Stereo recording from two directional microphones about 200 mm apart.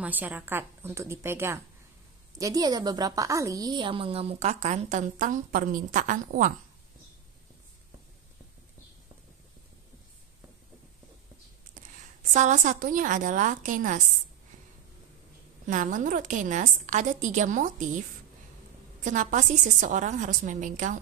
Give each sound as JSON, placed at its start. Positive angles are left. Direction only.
{"t": 0.0, "sound": "a woman's voice", "side_deg": -10}
{"t": 12.3, "sound": "a woman's voice", "side_deg": -40}
{"t": 15.6, "sound": "a woman's voice", "side_deg": -40}
{"t": 19.0, "sound": "a woman's voice", "side_deg": -40}